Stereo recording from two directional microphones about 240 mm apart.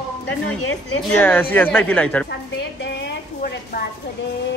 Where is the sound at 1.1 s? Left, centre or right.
Centre.